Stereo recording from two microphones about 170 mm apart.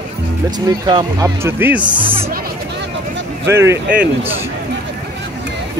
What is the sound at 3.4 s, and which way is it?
Speech, 15° right (ahead or behind).